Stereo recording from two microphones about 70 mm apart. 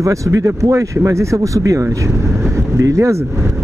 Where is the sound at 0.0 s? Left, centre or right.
Right.